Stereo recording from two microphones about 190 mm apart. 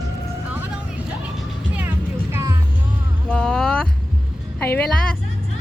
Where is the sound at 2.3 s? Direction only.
15° right (ahead or behind).